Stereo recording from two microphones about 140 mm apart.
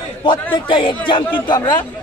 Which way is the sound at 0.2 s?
35° left (ahead or behind).